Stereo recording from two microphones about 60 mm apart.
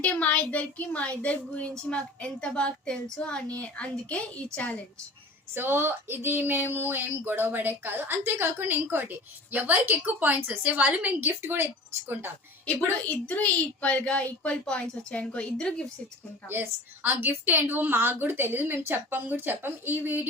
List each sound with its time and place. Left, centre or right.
0.0 s a woman's voice: left
5.5 s speech: right
13.2 s a woman's voice: left
16.5 s speech: right